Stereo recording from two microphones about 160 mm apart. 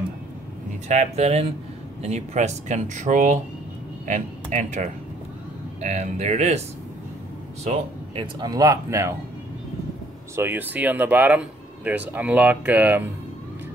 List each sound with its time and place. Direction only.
0.8 s speech: 45° right (ahead or behind)
7.6 s speech: 35° right (ahead or behind); by 9.1 s 20° right (ahead or behind)
10.3 s speech: 15° right (ahead or behind)